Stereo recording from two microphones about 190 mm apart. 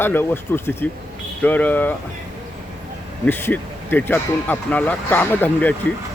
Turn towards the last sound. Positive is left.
turn(degrees=10)  # may be behind; listen again after turning